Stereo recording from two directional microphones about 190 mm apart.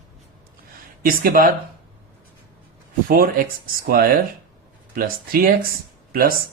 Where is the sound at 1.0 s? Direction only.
50° right (ahead or behind).